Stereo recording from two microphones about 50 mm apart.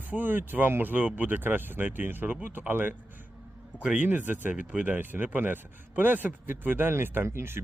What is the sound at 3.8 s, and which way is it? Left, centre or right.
Speech, right.